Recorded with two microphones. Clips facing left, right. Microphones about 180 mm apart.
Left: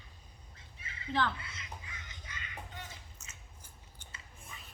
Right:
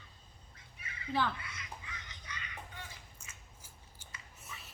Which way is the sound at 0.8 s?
25° left (ahead or behind).